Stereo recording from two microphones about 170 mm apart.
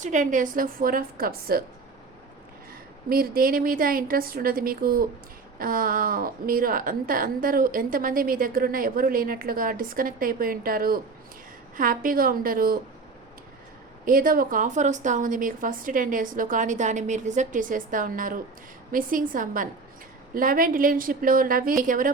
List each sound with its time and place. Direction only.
0.0 s a woman's voice: 45° right (ahead or behind)
3.1 s a woman's voice: 60° right (ahead or behind)
14.0 s a woman's voice: 55° right (ahead or behind)